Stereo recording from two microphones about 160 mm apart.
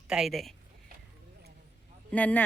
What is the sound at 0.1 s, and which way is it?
Speech, centre (ahead or behind).